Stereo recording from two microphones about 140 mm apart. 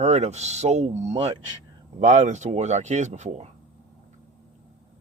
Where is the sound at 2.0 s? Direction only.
55° right (ahead or behind).